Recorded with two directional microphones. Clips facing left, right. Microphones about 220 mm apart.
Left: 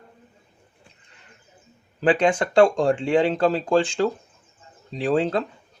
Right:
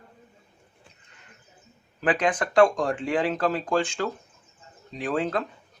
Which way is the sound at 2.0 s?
25° left (ahead or behind).